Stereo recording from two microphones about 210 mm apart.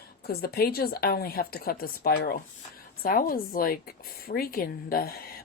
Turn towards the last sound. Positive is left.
turn(degrees=45)  # may be behind; listen again after turning